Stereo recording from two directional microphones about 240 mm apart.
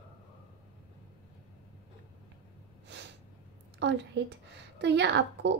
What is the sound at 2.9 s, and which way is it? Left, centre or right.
Snort, right.